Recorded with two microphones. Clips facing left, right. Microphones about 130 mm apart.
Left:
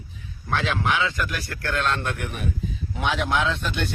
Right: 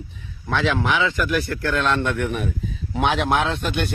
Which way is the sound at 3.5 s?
60° right (ahead or behind).